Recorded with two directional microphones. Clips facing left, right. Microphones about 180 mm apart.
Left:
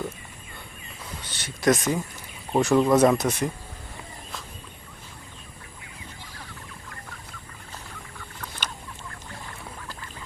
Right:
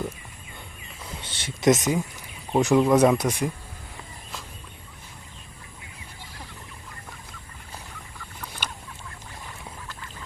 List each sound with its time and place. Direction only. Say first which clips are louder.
1.2 s a sound: right 2 dB; 25° right (ahead or behind)
2.6 s speech: even; 15° right (ahead or behind)
8.4 s chicken: even; 10° right (ahead or behind)